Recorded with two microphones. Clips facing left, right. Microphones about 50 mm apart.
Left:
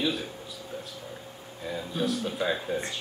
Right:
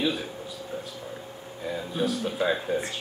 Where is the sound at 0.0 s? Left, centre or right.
Centre.